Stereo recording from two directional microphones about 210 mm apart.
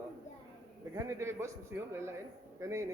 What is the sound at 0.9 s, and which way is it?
A man's voice, 15° right (ahead or behind).